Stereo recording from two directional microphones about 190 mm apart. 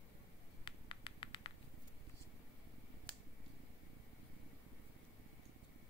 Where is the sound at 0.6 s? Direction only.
25° left (ahead or behind).